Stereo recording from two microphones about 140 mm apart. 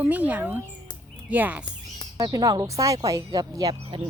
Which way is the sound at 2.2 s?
25° right (ahead or behind).